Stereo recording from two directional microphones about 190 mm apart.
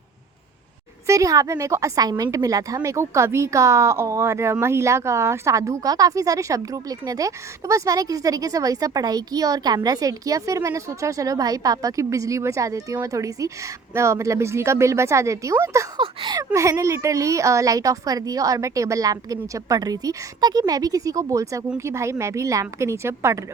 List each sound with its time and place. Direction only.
1.0 s a woman's voice: 15° right (ahead or behind)